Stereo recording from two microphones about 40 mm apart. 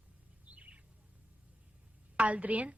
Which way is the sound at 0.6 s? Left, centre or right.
Right.